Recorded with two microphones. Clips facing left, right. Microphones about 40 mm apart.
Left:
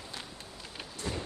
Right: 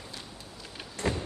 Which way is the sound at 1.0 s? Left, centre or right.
Right.